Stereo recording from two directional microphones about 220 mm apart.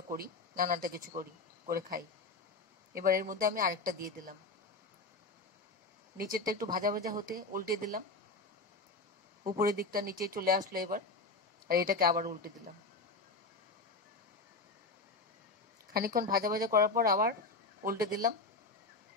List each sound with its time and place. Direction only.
0.1 s speech: 40° right (ahead or behind)
6.1 s speech: 40° right (ahead or behind)
9.5 s speech: 40° right (ahead or behind)
15.9 s speech: 40° right (ahead or behind)